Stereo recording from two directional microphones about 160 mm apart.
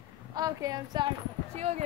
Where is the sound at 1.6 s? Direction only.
45° right (ahead or behind).